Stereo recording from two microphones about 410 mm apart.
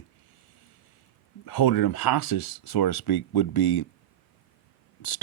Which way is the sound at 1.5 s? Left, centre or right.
Left.